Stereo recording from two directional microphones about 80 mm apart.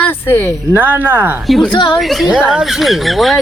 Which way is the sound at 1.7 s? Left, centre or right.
Left.